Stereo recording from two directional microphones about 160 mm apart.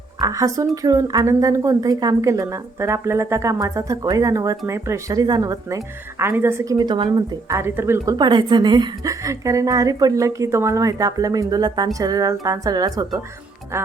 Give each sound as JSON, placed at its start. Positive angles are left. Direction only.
{"t": 0.2, "sound": "a woman's voice", "side_deg": -20}
{"t": 8.2, "sound": "a woman's voice", "side_deg": -30}